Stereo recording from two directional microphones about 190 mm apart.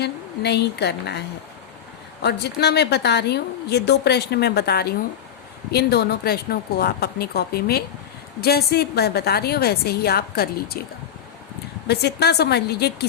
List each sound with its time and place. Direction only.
0.0 s a woman's voice: 60° left (ahead or behind)
2.2 s a woman's voice: 60° left (ahead or behind)
11.9 s a woman's voice: 60° left (ahead or behind)